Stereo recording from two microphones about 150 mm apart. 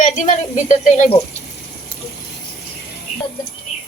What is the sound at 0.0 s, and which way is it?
A woman's voice, 55° left (ahead or behind).